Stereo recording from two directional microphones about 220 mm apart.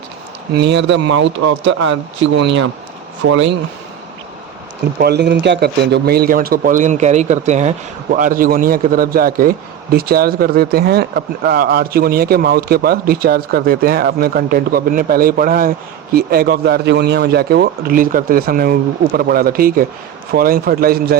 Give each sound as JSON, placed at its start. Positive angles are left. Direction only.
{"t": 0.5, "sound": "speech", "side_deg": -50}
{"t": 4.9, "sound": "a man's voice", "side_deg": -45}